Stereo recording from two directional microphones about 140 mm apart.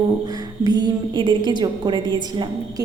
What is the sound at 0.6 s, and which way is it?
A woman's voice, 30° right (ahead or behind).